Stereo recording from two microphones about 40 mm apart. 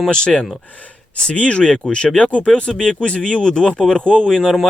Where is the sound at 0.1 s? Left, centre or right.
Left.